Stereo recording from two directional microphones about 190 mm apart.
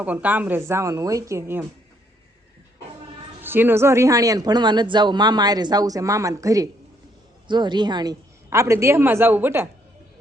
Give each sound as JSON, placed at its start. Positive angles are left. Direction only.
{"t": 0.0, "sound": "a woman's voice", "side_deg": -10}
{"t": 3.4, "sound": "a woman's voice", "side_deg": -10}